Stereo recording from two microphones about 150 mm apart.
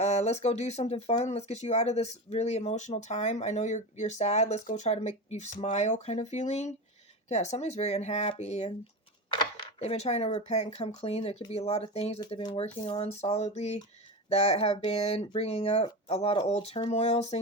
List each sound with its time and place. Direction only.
0.0 s speech: 45° left (ahead or behind)
9.4 s a sound: 30° left (ahead or behind)
9.9 s speech: 45° left (ahead or behind)